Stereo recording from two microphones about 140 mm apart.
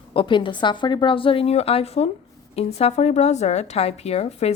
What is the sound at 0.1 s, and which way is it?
A woman's voice, 35° left (ahead or behind).